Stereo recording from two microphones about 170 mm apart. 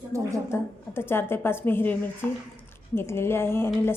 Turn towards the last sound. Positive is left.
turn(degrees=15)  # may be behind; listen again after turning